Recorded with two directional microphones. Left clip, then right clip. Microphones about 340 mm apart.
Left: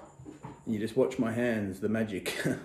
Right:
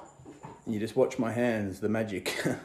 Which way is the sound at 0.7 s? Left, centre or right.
Centre.